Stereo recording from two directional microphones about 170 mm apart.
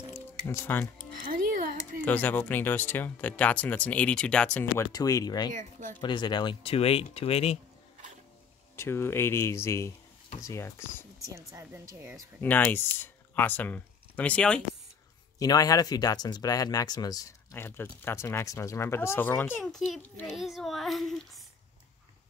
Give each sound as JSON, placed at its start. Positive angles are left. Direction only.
{"t": 0.1, "sound": "music", "side_deg": 15}
{"t": 1.3, "sound": "music", "side_deg": -60}
{"t": 2.0, "sound": "speech", "side_deg": 10}
{"t": 4.9, "sound": "speech", "side_deg": 20}
{"t": 5.5, "sound": "speech", "side_deg": -50}
{"t": 5.9, "sound": "speech", "side_deg": 25}
{"t": 8.7, "sound": "speech", "side_deg": 15}
{"t": 11.3, "sound": "speech", "side_deg": -15}
{"t": 12.4, "sound": "speech", "side_deg": 10}
{"t": 15.3, "sound": "speech", "side_deg": 20}